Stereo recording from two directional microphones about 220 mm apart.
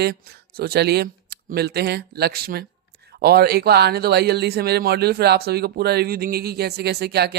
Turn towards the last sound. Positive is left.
turn(degrees=-45)  # may be behind; listen again after turning